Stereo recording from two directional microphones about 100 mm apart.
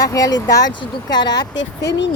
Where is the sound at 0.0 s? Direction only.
35° left (ahead or behind).